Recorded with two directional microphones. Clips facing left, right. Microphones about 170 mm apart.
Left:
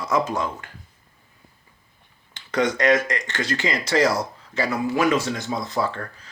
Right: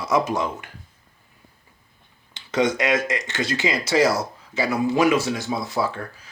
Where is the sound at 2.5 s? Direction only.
15° right (ahead or behind).